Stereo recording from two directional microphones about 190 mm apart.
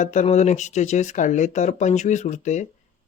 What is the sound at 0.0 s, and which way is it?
Speech, 40° left (ahead or behind).